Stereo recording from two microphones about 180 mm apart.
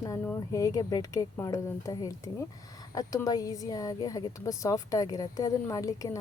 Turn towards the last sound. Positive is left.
turn(degrees=20)  # may be behind; listen again after turning